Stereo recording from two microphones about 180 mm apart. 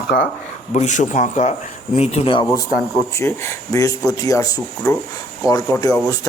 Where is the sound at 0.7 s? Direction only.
40° left (ahead or behind).